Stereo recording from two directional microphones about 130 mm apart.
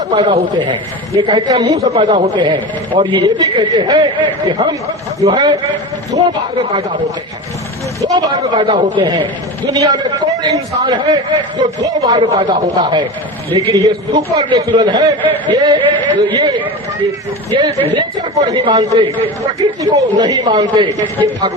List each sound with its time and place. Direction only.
0.1 s a man's voice: 35° right (ahead or behind)
8.0 s a man's voice: 30° right (ahead or behind)
17.5 s a man's voice: 35° right (ahead or behind)